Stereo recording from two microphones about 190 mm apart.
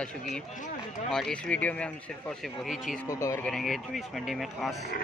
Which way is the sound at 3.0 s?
15° left (ahead or behind).